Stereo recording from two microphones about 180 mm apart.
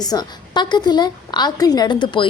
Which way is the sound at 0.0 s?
20° left (ahead or behind).